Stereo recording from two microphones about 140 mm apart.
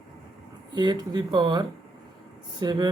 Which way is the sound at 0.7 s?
30° right (ahead or behind).